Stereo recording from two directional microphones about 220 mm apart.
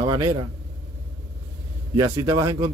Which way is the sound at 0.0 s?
15° right (ahead or behind).